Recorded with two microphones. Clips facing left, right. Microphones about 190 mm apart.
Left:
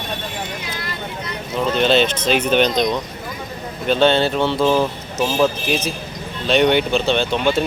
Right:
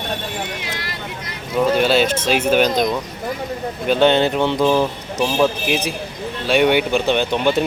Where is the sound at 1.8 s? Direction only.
5° right (ahead or behind).